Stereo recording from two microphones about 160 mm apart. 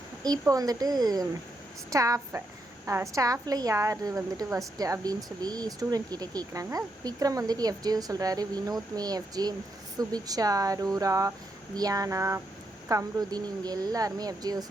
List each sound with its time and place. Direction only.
0.2 s a woman's voice: 25° right (ahead or behind)